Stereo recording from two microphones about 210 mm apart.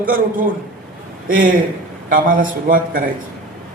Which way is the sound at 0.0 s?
40° right (ahead or behind).